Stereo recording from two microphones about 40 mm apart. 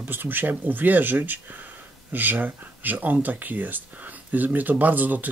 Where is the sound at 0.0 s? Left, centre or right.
Right.